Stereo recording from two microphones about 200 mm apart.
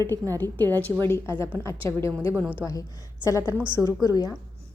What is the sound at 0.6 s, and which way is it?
A woman's voice, 10° left (ahead or behind).